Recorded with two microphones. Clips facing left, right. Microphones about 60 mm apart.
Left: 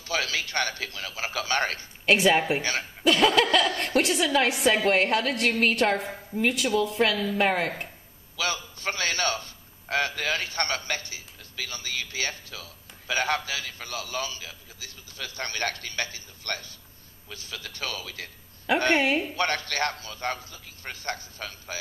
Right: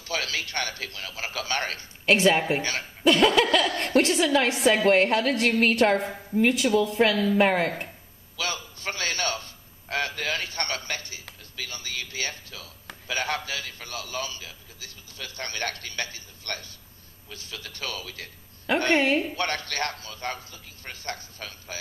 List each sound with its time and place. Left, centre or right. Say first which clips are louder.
0.0 s a man's voice: left 1 dB; left
2.0 s a woman's voice: even; centre
8.4 s a sound: left 2 dB; left
11.6 s a man's voice: left 1 dB; left
17.3 s a man's voice: left 1 dB; left
18.9 s speech: right 1 dB; centre
19.3 s a man's voice: left 2 dB; left